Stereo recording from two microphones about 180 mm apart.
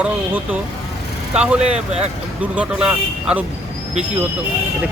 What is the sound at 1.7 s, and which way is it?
Speech, 40° right (ahead or behind).